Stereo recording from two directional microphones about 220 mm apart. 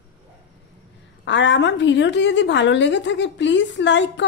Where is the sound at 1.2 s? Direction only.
55° left (ahead or behind).